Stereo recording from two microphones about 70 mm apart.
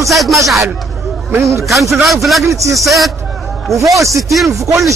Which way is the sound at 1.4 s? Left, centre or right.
Right.